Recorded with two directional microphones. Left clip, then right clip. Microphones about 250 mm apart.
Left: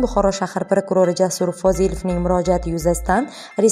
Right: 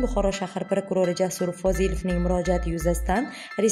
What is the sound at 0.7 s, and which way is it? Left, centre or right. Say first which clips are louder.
Speech: left 7 dB; centre.